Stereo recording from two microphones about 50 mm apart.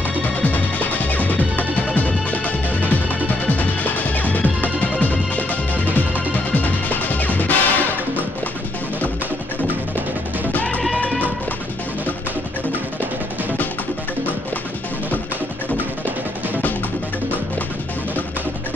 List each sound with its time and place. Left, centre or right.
0.4 s music: left
10.5 s music: left